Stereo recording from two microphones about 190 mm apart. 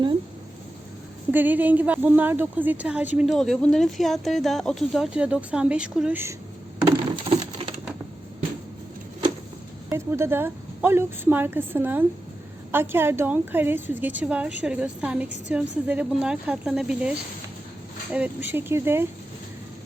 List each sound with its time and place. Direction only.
1.3 s a woman's voice: 10° right (ahead or behind)
6.8 s a sound: 25° right (ahead or behind)
9.9 s a woman's voice: 15° right (ahead or behind)
18.1 s speech: 10° right (ahead or behind)